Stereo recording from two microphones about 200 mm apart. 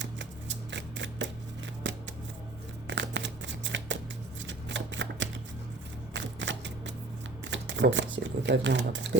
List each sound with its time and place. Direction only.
0.0 s scissors: 65° right (ahead or behind)
4.4 s shuffling cards: 65° right (ahead or behind)
7.4 s speech: 65° right (ahead or behind)